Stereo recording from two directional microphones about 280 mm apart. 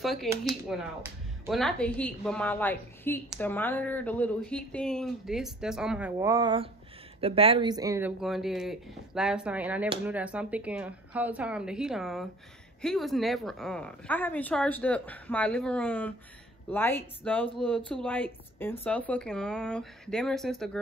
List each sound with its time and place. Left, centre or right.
0.0 s speech: centre
8.2 s speech: centre